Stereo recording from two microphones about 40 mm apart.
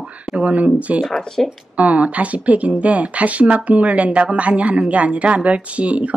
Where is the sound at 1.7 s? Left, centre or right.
Right.